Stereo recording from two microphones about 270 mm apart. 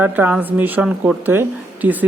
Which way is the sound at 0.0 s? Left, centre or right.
Centre.